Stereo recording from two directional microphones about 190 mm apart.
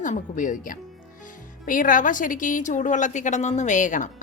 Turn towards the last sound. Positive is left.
turn(degrees=40)  # may be behind; listen again after turning